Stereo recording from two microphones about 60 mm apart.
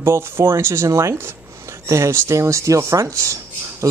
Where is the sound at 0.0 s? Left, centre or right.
Right.